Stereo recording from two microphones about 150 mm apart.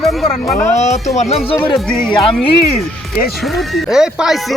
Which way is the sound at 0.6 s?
50° left (ahead or behind).